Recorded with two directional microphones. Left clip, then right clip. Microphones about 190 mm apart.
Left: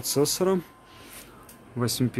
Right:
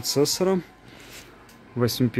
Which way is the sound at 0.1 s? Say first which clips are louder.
Right 2 dB; 10° right (ahead or behind).